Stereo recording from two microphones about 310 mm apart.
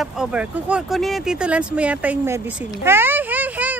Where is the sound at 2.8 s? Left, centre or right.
Centre.